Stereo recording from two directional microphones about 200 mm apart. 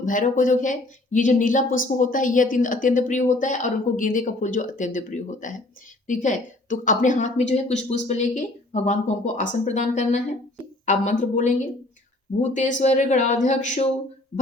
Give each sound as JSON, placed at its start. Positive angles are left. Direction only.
{"t": 0.0, "sound": "speech", "side_deg": 40}